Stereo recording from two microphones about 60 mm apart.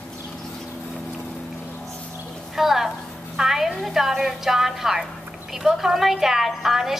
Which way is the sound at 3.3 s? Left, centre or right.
Centre.